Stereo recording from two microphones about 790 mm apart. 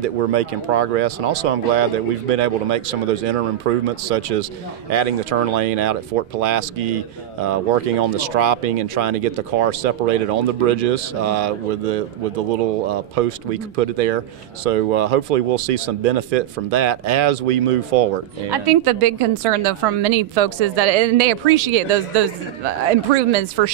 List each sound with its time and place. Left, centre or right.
0.0 s speech: right
18.5 s a woman's voice: right